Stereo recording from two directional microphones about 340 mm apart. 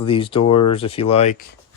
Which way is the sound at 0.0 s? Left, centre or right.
Centre.